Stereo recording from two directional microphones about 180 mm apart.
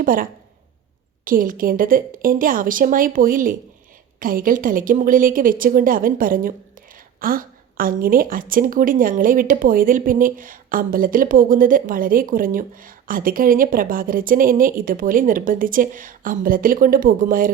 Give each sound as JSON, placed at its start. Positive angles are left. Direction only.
{"t": 0.0, "sound": "a woman's voice", "side_deg": -50}